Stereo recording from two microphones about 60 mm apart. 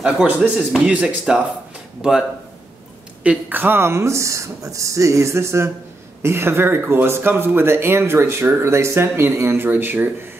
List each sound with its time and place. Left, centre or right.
0.0 s speech: centre
3.4 s speech: right
9.7 s speech: right